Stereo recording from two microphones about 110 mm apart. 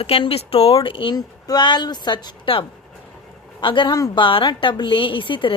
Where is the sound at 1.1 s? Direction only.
40° left (ahead or behind).